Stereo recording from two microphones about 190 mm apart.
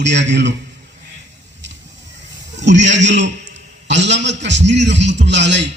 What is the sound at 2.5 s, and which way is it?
A man's voice, 70° right (ahead or behind).